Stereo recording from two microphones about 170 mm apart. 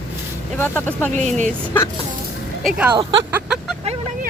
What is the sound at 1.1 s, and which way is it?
Speech, 45° right (ahead or behind).